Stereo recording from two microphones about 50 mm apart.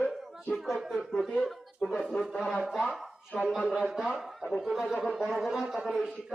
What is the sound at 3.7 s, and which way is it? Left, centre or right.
A man's voice, centre.